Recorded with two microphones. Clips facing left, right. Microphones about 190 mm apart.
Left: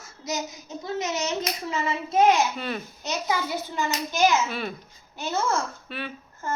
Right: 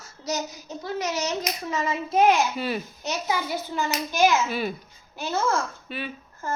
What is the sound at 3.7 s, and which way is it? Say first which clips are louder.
Speech: right 2 dB; 20° left (ahead or behind).